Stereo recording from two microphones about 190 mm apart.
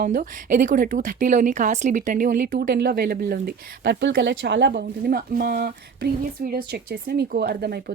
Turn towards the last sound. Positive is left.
turn(degrees=-55)  # may be behind; listen again after turning